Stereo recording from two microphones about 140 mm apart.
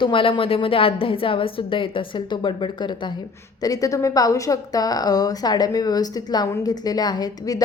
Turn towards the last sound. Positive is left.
turn(degrees=30)  # may be behind; listen again after turning